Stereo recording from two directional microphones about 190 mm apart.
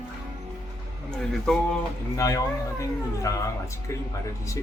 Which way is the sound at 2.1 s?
20° left (ahead or behind).